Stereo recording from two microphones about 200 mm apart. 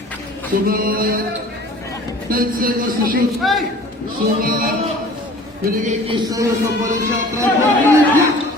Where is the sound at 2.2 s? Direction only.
45° right (ahead or behind).